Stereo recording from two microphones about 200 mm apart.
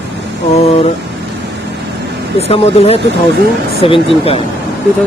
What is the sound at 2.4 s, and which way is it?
Speech, 30° left (ahead or behind).